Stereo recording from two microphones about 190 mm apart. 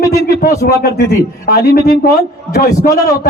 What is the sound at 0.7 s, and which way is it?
Speech, 55° left (ahead or behind).